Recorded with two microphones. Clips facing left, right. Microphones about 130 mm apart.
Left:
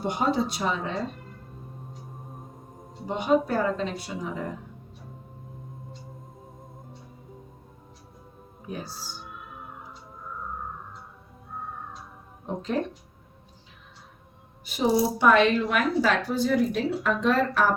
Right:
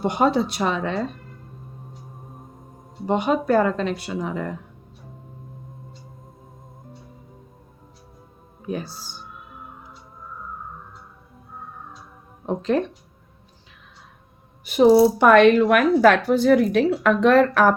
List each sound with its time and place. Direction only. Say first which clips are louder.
0.0 s speech: right 5 dB; 80° right
3.1 s speech: right 4 dB; 75° right (ahead or behind)
8.6 s speech: right 7 dB; 75° right (ahead or behind)
12.5 s speech: right 7 dB; 75° right (ahead or behind)
14.6 s speech: right 10 dB; 65° right (ahead or behind)